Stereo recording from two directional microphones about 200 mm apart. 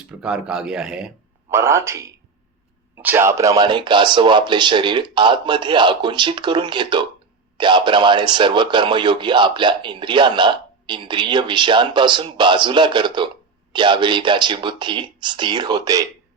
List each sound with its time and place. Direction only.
0.1 s a man's voice: 5° right (ahead or behind)